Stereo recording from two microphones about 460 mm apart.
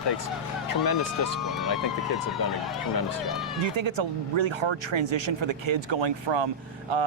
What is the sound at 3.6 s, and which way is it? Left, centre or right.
Speech, right.